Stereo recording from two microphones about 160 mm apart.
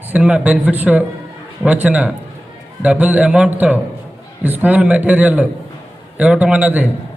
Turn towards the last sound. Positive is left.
turn(degrees=-10)  # may be behind; listen again after turning